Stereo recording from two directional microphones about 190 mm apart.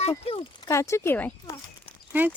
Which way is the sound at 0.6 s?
15° left (ahead or behind).